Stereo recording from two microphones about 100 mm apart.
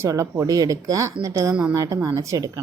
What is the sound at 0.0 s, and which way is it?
Speech, 30° right (ahead or behind).